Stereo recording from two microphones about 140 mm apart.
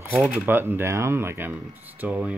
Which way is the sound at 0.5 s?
15° right (ahead or behind).